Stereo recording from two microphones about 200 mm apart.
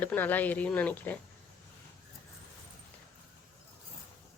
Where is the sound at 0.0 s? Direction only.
10° left (ahead or behind).